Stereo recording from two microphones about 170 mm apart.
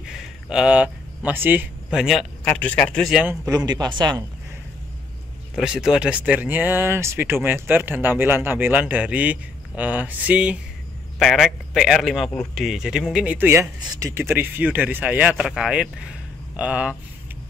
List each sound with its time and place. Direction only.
0.0 s speech: 5° right (ahead or behind)
3.4 s speech: 25° right (ahead or behind)
5.6 s a man's voice: 5° right (ahead or behind)